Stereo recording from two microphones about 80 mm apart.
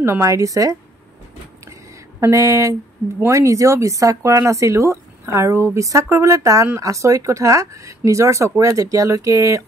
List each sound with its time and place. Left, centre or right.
0.0 s speech: right
2.1 s a sound: right
3.3 s speech: right